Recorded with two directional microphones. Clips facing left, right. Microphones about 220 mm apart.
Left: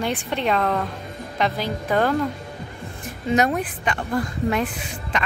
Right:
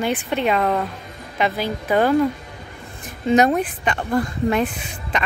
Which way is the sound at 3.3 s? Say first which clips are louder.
Right 4 dB; 25° right (ahead or behind).